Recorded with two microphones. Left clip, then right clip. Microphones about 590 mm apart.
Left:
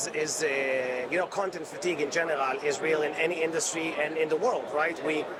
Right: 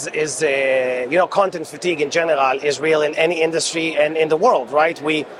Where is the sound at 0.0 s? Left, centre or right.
Right.